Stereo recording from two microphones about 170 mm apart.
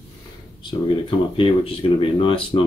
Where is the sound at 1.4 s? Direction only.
35° left (ahead or behind).